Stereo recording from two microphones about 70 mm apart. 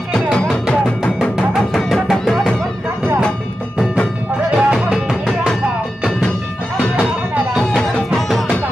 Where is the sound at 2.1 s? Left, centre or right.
Centre.